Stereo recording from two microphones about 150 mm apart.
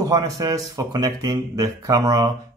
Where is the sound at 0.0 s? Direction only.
25° right (ahead or behind).